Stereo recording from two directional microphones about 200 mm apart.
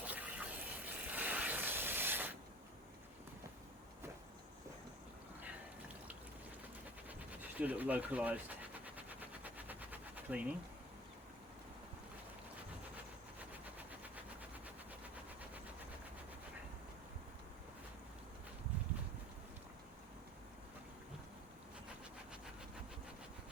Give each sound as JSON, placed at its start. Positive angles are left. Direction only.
{"t": 0.0, "sound": "a sound", "side_deg": -10}
{"t": 7.1, "sound": "speech", "side_deg": -10}
{"t": 9.0, "sound": "machine gun", "side_deg": -10}